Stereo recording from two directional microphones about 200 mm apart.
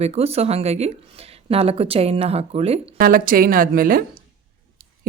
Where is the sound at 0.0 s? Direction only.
30° right (ahead or behind).